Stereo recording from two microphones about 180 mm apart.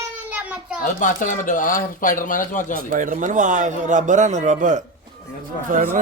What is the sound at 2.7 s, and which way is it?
Speech, 50° right (ahead or behind).